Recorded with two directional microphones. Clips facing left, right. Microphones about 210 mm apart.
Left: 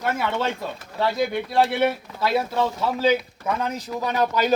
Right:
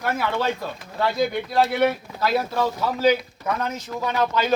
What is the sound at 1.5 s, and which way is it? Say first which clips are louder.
Speech: even; centre (ahead or behind).